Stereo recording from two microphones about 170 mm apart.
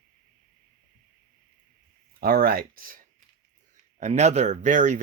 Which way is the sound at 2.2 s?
60° right (ahead or behind).